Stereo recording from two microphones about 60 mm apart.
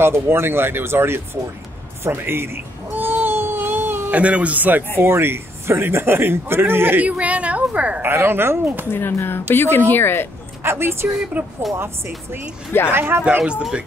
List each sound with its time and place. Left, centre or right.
0.0 s a man's voice: right
2.0 s baby cry: right
4.1 s a woman's voice: right
5.0 s a man's voice: right
7.0 s a woman's voice: right
8.0 s a man's voice: right
8.9 s speech: left
10.6 s speech: right
11.4 s a woman's voice: right
12.9 s a man's voice: right
13.4 s speech: centre